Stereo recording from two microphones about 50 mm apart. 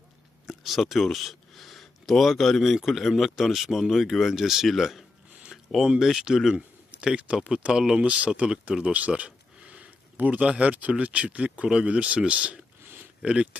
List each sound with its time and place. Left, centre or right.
0.4 s speech: centre
7.0 s speech: right
7.9 s speech: right
12.8 s a sound: right
13.2 s speech: right